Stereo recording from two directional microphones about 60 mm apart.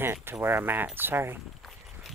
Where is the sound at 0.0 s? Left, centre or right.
Right.